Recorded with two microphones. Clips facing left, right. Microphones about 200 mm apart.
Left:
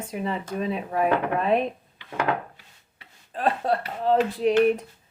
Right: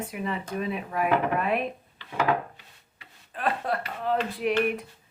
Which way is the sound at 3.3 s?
30° left (ahead or behind).